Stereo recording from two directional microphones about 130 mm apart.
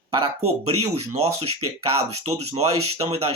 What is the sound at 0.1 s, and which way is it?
Speech, 50° right (ahead or behind).